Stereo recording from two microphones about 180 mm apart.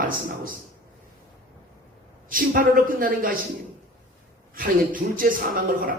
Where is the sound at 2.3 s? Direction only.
50° right (ahead or behind).